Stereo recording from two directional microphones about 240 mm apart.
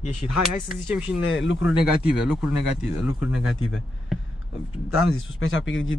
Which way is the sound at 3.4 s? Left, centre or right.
Left.